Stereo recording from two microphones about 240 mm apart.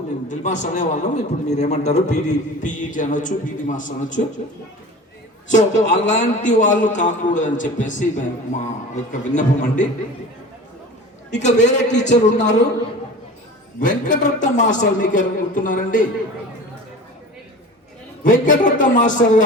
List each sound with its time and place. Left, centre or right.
0.3 s a man's voice: left
5.5 s a man's voice: left
11.3 s a man's voice: left
13.7 s a man's voice: left
18.2 s a man's voice: left